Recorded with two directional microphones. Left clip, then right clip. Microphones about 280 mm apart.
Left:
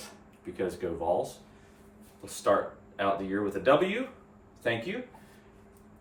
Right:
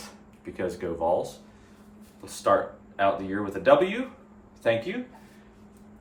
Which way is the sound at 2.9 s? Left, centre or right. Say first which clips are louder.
Right 4 dB; centre.